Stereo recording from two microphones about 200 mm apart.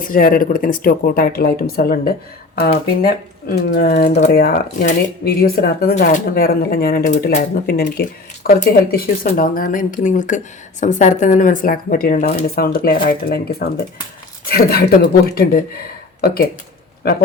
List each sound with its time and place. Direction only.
0.0 s speech: 45° left (ahead or behind)
3.4 s speech: 50° left (ahead or behind)